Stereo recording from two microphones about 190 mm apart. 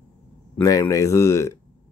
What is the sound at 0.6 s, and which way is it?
Speech, 15° left (ahead or behind).